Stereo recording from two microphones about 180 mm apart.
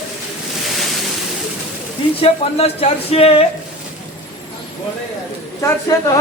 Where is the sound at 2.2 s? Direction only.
35° left (ahead or behind).